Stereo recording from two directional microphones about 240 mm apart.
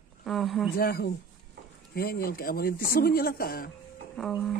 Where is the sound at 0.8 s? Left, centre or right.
Left.